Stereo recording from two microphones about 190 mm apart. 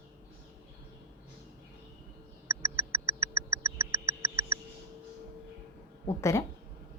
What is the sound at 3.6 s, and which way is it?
Frog, 15° right (ahead or behind).